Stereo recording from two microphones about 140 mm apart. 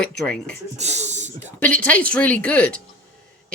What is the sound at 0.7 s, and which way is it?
Speech, 55° right (ahead or behind).